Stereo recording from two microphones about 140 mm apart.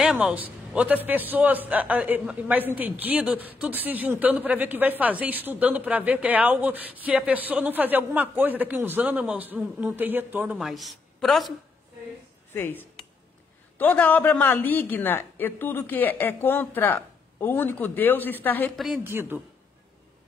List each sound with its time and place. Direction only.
0.0 s a man's voice: 5° right (ahead or behind)
10.6 s a woman's voice: centre (ahead or behind)
12.5 s a woman's voice: 15° left (ahead or behind)
19.0 s a man's voice: 15° right (ahead or behind)